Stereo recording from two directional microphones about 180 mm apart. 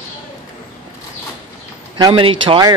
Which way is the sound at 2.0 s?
25° right (ahead or behind).